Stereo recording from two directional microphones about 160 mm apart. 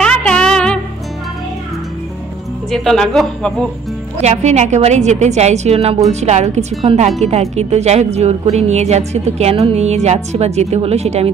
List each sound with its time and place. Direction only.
0.0 s music: 5° left (ahead or behind)
2.7 s speech: centre (ahead or behind)
4.2 s a woman's voice: 45° right (ahead or behind)